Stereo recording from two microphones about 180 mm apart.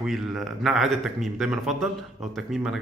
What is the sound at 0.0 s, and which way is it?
A man's voice, centre (ahead or behind).